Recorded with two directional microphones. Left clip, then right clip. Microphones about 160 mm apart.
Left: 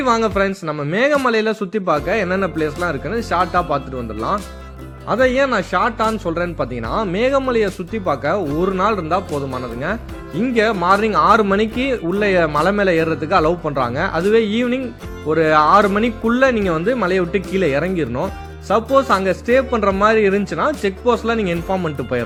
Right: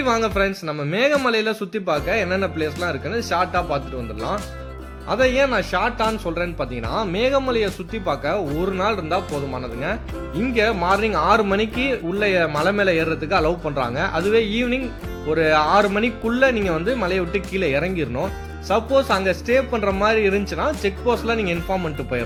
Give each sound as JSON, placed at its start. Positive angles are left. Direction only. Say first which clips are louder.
{"t": 0.0, "sound": "speech", "louder": "left 3 dB", "side_deg": 50}